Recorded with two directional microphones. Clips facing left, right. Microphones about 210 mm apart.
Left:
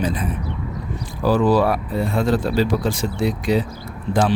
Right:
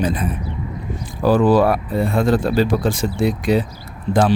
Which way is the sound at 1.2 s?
50° right (ahead or behind).